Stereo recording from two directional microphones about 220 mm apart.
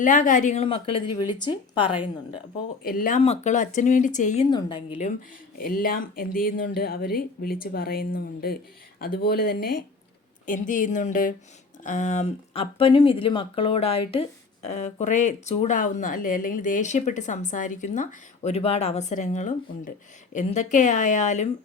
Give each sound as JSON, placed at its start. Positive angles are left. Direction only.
{"t": 0.0, "sound": "a woman's voice", "side_deg": 35}
{"t": 2.8, "sound": "speech", "side_deg": 40}
{"t": 3.2, "sound": "speech", "side_deg": 30}
{"t": 4.5, "sound": "a woman's voice", "side_deg": 20}
{"t": 5.5, "sound": "speech", "side_deg": 40}